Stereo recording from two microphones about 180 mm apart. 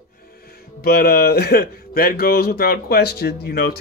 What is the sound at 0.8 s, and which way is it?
Speech, 60° left (ahead or behind).